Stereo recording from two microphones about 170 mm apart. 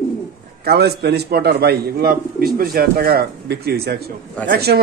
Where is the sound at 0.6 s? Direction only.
70° right (ahead or behind).